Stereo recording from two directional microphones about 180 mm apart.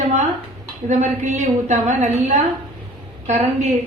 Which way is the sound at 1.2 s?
40° right (ahead or behind).